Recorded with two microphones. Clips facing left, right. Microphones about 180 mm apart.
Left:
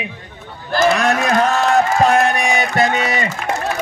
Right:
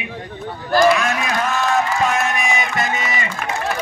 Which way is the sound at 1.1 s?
50° left (ahead or behind).